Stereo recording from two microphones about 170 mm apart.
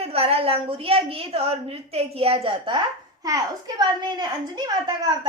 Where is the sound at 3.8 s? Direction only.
25° right (ahead or behind).